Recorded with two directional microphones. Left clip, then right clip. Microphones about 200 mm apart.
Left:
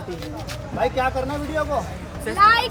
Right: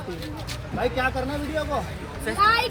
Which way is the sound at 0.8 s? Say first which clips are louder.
Left 3 dB; centre (ahead or behind).